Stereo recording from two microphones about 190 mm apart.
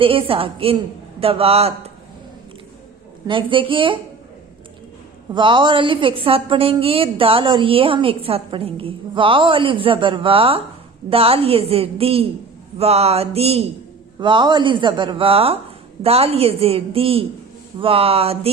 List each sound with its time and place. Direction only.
0.0 s a woman's voice: 30° right (ahead or behind)
3.2 s a woman's voice: 25° right (ahead or behind)
5.3 s a woman's voice: 25° right (ahead or behind)